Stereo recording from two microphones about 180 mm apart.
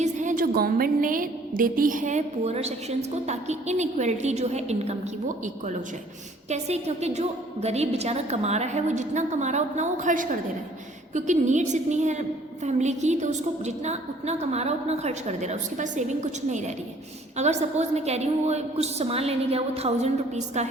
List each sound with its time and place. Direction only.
0.0 s a woman's voice: 45° right (ahead or behind)
6.5 s a woman's voice: 35° right (ahead or behind)